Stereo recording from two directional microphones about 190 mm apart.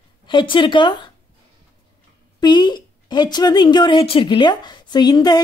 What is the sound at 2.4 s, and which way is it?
Speech, 25° left (ahead or behind).